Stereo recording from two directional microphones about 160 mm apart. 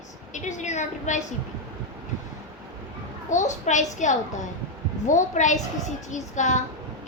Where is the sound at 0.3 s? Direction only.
50° left (ahead or behind).